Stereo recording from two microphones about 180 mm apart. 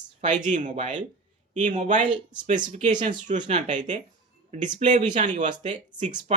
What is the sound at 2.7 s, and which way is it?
Speech, 45° right (ahead or behind).